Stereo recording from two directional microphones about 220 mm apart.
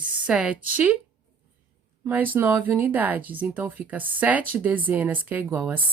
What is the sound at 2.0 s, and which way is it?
Speech, 10° right (ahead or behind).